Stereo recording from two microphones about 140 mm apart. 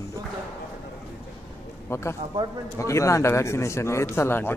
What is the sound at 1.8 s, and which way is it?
Speech, 20° left (ahead or behind).